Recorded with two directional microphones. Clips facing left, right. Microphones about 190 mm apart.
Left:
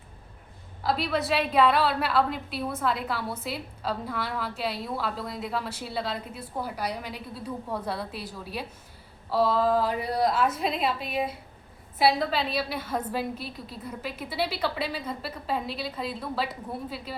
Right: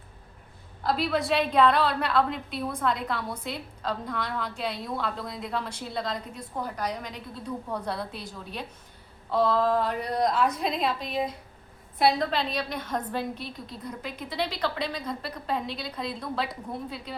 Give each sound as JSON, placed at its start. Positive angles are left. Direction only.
{"t": 0.8, "sound": "a woman's voice", "side_deg": 0}